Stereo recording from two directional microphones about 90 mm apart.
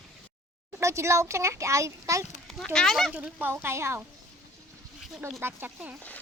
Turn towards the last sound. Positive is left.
turn(degrees=-20)  # may be behind; listen again after turning